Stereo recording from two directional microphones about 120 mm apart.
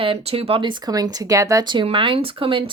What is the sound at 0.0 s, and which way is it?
Speech, 50° right (ahead or behind).